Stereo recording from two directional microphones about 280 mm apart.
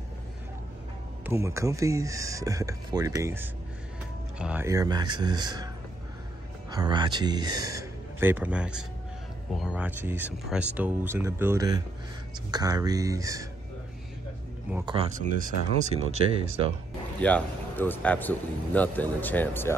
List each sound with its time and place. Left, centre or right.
1.2 s speech: centre
6.7 s speech: centre
14.7 s speech: centre
15.0 s speech: right
17.2 s speech: centre